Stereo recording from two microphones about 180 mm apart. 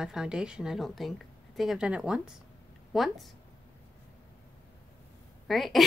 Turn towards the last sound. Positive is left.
turn(degrees=0)  # may be behind; listen again after turning